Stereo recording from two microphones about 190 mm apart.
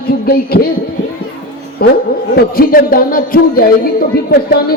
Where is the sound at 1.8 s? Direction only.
55° left (ahead or behind).